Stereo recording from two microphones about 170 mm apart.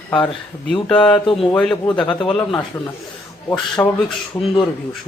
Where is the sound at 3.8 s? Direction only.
10° left (ahead or behind).